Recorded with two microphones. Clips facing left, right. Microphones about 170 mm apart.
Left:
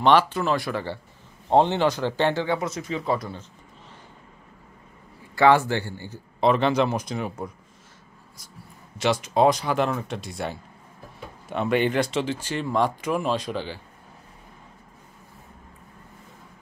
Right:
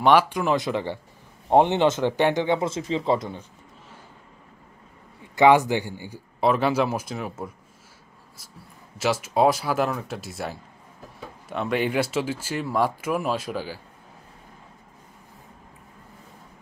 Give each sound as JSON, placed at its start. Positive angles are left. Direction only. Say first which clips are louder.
{"t": 0.0, "sound": "speech", "louder": "even", "side_deg": -10}
{"t": 5.3, "sound": "speech", "louder": "right 1 dB", "side_deg": -15}
{"t": 8.9, "sound": "speech", "louder": "left 1 dB", "side_deg": -5}